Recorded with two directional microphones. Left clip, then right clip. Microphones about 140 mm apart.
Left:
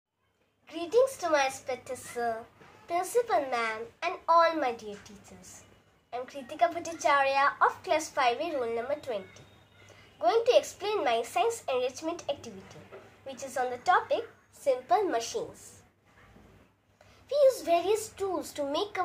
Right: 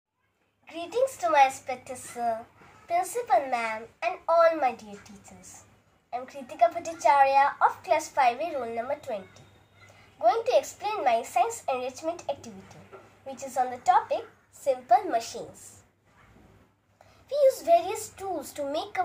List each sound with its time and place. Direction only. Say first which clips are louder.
0.7 s a woman's voice: left 2 dB; 25° left (ahead or behind)
6.0 s a woman's voice: right 2 dB; 25° left (ahead or behind)
17.3 s a woman's voice: right 3 dB; 25° left (ahead or behind)